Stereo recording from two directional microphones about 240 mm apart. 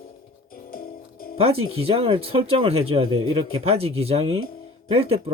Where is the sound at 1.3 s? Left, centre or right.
Right.